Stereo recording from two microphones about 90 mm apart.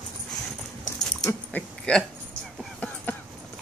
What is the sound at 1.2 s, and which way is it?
Speech, 15° left (ahead or behind).